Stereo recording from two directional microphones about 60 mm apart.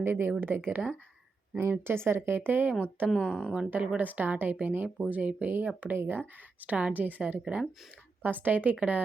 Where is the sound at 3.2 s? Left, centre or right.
Left.